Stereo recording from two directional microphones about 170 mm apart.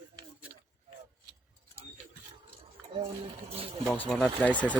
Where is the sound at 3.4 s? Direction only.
35° right (ahead or behind).